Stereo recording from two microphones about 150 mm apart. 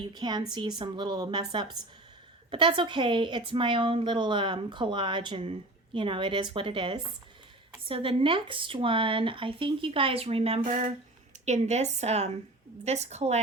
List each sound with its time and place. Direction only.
0.1 s a woman's voice: 30° right (ahead or behind); by 13.4 s 45° right (ahead or behind)